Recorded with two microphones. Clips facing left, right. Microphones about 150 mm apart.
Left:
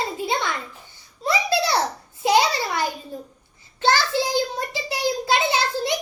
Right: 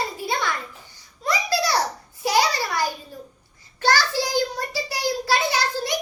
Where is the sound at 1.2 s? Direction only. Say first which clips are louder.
Left 2 dB; 25° left (ahead or behind).